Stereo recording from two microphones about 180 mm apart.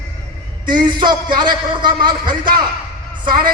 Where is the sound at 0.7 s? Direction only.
25° right (ahead or behind).